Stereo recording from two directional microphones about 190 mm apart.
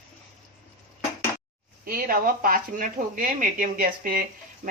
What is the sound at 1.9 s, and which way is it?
Speech, 50° right (ahead or behind).